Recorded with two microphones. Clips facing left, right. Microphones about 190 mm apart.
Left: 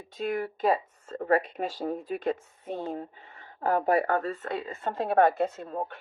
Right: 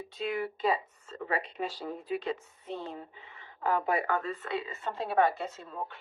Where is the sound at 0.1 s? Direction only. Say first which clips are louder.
Left 4 dB; 50° left (ahead or behind).